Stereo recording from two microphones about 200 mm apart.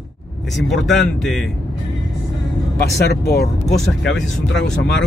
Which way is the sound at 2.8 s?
55° left (ahead or behind).